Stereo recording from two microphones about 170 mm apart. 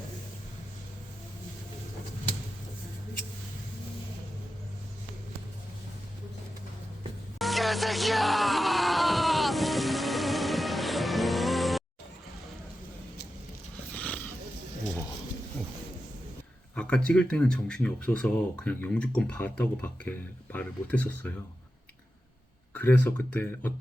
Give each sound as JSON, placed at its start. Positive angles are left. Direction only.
{"t": 7.3, "sound": "music", "side_deg": 0}
{"t": 13.9, "sound": "wild animals", "side_deg": 10}
{"t": 16.7, "sound": "speech", "side_deg": 5}
{"t": 22.7, "sound": "speech", "side_deg": 10}